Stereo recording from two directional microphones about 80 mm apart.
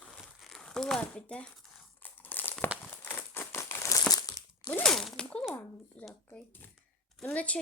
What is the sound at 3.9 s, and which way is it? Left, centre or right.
Crumpling, left.